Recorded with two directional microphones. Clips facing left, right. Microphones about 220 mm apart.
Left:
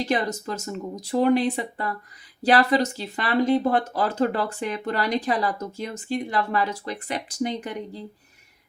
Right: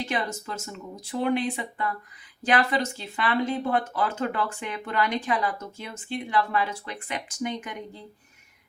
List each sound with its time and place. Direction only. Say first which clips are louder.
0.0 s speech: left 5 dB; 40° left (ahead or behind)